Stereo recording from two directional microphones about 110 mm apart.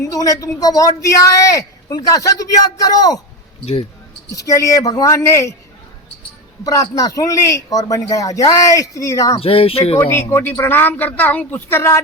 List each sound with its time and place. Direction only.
0.0 s speech: 30° left (ahead or behind)
4.3 s speech: 30° left (ahead or behind)
6.7 s speech: 30° left (ahead or behind)
9.4 s speech: 60° left (ahead or behind)
10.0 s speech: 20° left (ahead or behind)